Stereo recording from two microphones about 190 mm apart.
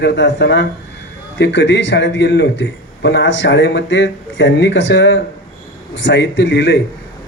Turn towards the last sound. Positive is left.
turn(degrees=65)  # may be behind; listen again after turning